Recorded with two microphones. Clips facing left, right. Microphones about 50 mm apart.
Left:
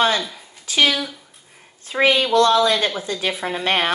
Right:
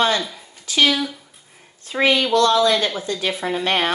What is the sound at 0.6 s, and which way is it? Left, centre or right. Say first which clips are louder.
A woman's voice: right 1 dB; left.